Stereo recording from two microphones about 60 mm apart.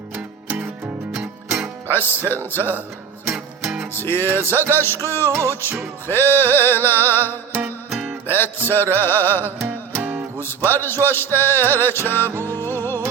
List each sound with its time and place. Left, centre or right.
1.1 s music: centre
1.9 s music: left
3.9 s music: left
7.9 s music: centre
8.3 s music: left
9.6 s music: right
10.7 s music: left